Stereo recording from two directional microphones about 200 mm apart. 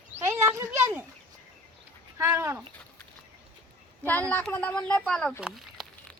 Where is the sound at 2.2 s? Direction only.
15° right (ahead or behind).